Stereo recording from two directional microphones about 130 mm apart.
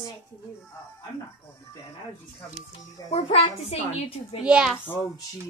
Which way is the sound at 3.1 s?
55° left (ahead or behind).